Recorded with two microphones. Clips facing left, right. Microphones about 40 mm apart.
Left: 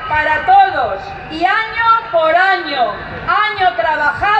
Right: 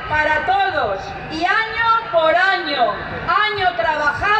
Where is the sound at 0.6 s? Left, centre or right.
Centre.